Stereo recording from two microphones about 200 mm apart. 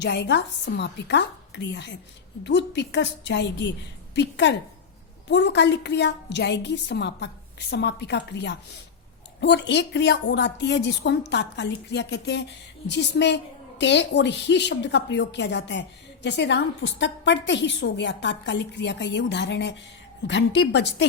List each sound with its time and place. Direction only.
0.0 s a woman's voice: 60° left (ahead or behind)